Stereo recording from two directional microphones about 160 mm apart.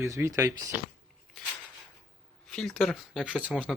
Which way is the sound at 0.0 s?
20° right (ahead or behind).